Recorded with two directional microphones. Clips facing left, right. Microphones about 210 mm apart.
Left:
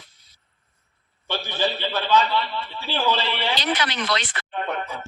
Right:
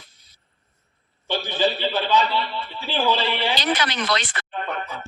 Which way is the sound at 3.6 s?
45° right (ahead or behind).